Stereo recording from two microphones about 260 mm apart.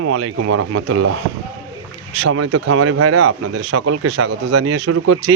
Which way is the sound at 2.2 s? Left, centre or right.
Right.